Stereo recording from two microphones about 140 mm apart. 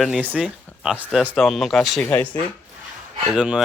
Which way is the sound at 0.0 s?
5° right (ahead or behind).